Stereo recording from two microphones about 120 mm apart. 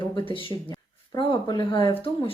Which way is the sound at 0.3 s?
45° left (ahead or behind).